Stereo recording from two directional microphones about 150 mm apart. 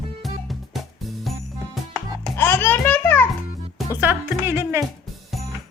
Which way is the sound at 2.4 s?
15° left (ahead or behind).